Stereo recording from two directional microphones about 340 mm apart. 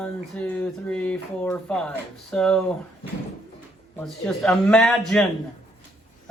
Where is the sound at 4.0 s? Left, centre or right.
Centre.